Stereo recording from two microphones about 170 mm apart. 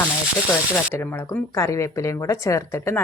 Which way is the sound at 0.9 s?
15° left (ahead or behind).